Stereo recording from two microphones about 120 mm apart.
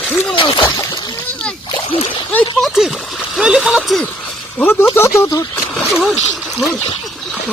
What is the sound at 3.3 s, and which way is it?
Speech, 5° right (ahead or behind).